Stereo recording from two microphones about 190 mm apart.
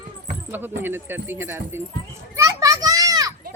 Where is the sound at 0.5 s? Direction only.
10° right (ahead or behind).